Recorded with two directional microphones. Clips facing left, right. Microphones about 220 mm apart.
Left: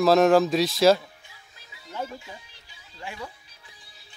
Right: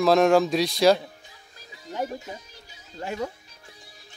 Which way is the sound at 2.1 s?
40° right (ahead or behind).